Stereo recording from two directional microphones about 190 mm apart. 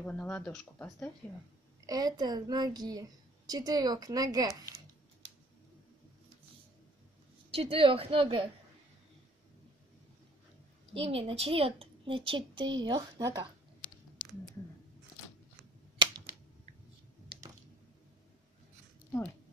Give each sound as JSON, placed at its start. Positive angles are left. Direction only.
{"t": 0.0, "sound": "speech", "side_deg": 10}
{"t": 1.9, "sound": "a woman's voice", "side_deg": -20}
{"t": 7.5, "sound": "a woman's voice", "side_deg": -30}
{"t": 11.1, "sound": "a woman's voice", "side_deg": -30}